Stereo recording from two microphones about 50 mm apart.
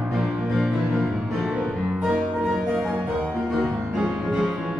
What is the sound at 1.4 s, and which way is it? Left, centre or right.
Music, centre.